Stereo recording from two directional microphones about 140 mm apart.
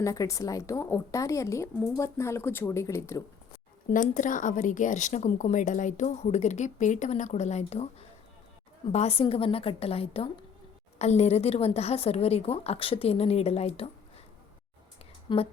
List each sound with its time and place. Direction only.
0.0 s a woman's voice: 25° left (ahead or behind)
3.9 s a woman's voice: 70° left (ahead or behind); by 13.8 s 45° left (ahead or behind)
15.3 s speech: 35° left (ahead or behind)